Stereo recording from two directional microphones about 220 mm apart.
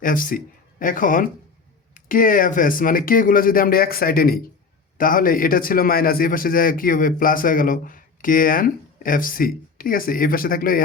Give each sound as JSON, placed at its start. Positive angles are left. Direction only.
{"t": 0.0, "sound": "a man's voice", "side_deg": 40}